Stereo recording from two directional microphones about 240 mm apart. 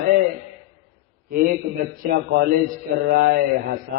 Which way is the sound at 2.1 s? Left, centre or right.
Right.